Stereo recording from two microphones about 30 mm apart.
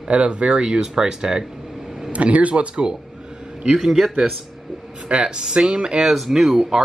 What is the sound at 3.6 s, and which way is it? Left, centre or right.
Speech, centre.